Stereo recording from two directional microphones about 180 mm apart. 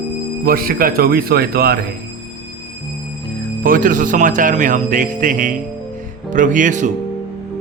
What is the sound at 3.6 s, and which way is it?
Speech, 50° right (ahead or behind).